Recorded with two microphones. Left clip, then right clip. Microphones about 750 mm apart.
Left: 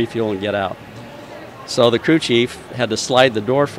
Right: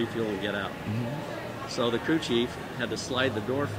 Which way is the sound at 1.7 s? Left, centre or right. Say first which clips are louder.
Left 13 dB; left.